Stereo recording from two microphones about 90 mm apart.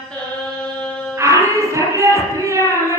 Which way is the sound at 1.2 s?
35° right (ahead or behind).